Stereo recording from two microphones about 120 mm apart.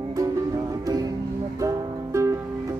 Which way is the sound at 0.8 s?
30° right (ahead or behind).